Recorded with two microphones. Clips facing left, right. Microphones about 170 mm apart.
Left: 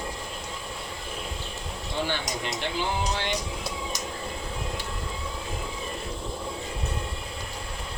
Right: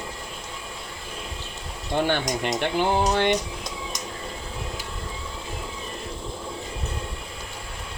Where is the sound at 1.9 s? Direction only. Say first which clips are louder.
Right 7 dB; 55° right (ahead or behind).